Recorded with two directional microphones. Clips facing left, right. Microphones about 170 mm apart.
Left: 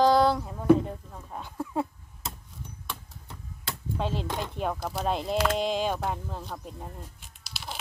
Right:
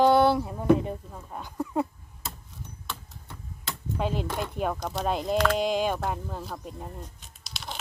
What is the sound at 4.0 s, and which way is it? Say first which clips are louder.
Speech: right 2 dB; 5° right (ahead or behind).